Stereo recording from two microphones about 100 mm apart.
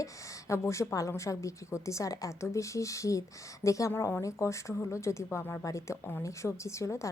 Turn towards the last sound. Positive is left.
turn(degrees=30)  # may be behind; listen again after turning